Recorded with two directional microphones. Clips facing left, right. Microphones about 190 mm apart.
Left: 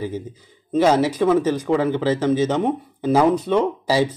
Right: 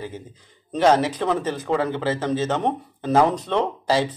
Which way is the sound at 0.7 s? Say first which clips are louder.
Left 2 dB; 10° left (ahead or behind).